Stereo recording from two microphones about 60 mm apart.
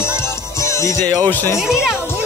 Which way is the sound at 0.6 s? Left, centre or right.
Left.